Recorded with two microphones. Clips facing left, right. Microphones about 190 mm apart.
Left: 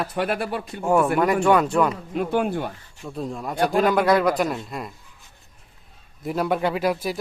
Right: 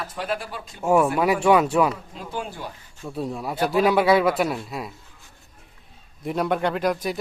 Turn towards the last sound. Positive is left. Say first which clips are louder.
# even
turn(degrees=5)  # may be behind; listen again after turning